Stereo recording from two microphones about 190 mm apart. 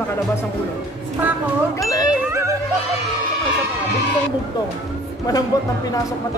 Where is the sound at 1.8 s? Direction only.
15° left (ahead or behind).